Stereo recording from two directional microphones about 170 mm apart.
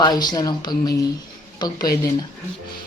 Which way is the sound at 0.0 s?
25° left (ahead or behind).